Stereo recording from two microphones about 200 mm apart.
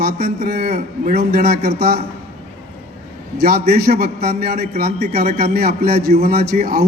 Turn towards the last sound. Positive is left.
turn(degrees=-50)  # may be behind; listen again after turning